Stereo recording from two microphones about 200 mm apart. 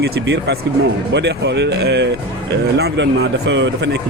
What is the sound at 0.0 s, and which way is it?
A man's voice, 55° right (ahead or behind).